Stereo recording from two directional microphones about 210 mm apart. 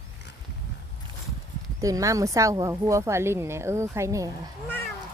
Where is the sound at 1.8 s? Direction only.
15° right (ahead or behind).